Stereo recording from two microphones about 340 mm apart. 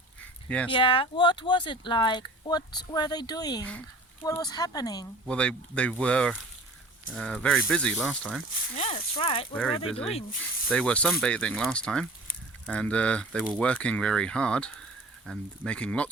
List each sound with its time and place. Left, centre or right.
0.4 s speech: centre
0.7 s speech: centre
8.7 s speech: centre
10.7 s speech: centre